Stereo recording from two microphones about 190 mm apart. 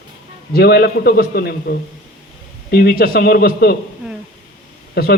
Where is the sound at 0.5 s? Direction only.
55° left (ahead or behind).